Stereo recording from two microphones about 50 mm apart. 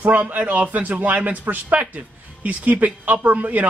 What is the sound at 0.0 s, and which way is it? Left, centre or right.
Speech, right.